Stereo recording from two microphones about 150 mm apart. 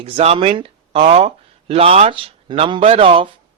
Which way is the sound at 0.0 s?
40° right (ahead or behind).